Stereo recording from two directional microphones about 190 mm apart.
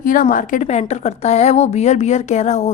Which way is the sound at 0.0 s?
45° left (ahead or behind).